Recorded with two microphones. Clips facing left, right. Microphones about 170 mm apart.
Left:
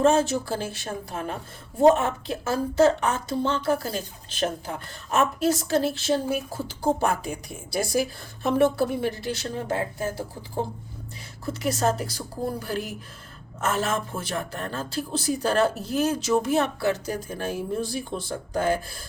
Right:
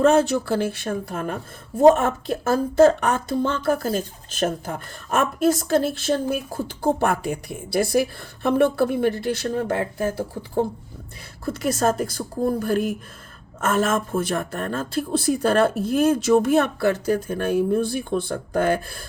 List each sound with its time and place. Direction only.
0.1 s a woman's voice: 60° right (ahead or behind)
11.4 s a woman's voice: 50° right (ahead or behind)